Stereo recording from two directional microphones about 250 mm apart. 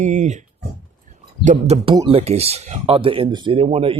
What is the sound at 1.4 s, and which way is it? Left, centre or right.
Speech, right.